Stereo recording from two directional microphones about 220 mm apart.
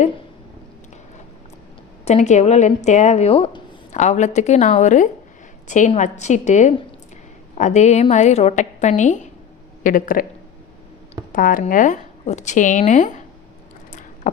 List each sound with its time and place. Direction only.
2.0 s speech: 30° left (ahead or behind)
11.3 s speech: 40° left (ahead or behind)